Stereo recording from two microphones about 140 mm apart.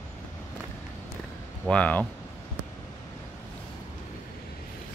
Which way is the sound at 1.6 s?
10° left (ahead or behind).